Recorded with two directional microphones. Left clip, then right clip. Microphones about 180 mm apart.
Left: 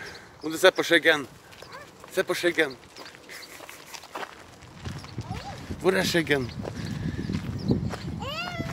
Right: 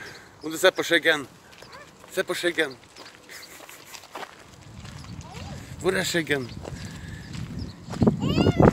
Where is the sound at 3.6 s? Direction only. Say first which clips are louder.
Left 1 dB; 5° right (ahead or behind).